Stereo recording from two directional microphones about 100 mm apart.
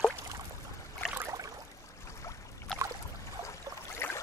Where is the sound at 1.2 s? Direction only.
35° right (ahead or behind).